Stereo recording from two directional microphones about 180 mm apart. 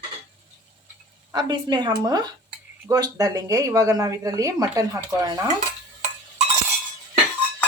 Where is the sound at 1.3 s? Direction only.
25° right (ahead or behind).